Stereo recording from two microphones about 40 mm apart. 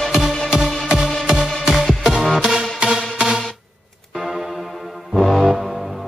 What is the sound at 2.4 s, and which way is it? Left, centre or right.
Music, centre.